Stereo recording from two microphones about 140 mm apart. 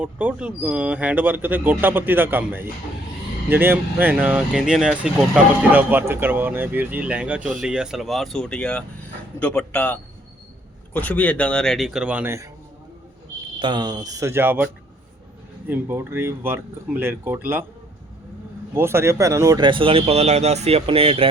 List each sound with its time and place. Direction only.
0.0 s a man's voice: 10° right (ahead or behind)
13.6 s speech: 35° right (ahead or behind); by 17.7 s 15° right (ahead or behind)
18.7 s speech: 15° right (ahead or behind); by 21.2 s 40° right (ahead or behind)